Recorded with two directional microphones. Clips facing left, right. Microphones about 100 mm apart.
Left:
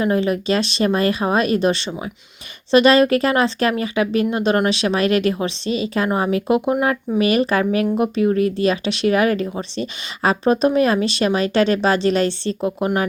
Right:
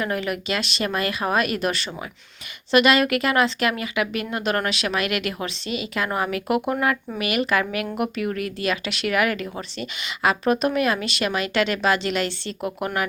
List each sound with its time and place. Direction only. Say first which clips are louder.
0.0 s speech: left 7 dB; 25° left (ahead or behind)